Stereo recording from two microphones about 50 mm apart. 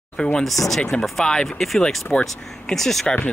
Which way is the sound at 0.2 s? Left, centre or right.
Centre.